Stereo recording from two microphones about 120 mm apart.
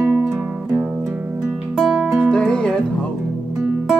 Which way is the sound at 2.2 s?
10° left (ahead or behind).